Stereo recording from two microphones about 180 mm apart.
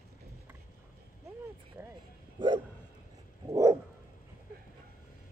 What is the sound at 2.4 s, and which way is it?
Bow-wow, 25° right (ahead or behind).